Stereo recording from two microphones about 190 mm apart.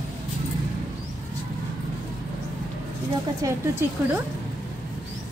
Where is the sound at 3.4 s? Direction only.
15° right (ahead or behind).